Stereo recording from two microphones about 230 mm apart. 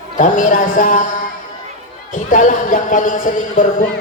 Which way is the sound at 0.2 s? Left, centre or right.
Left.